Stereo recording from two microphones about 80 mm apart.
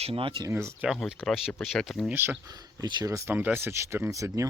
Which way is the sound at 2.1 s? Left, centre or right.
Right.